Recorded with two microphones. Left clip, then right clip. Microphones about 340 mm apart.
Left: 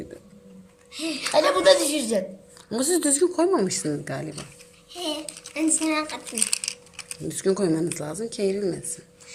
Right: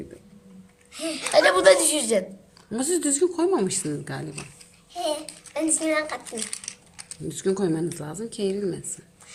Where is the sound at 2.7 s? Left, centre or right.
Centre.